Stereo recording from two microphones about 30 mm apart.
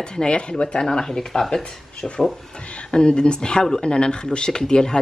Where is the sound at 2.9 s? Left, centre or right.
Left.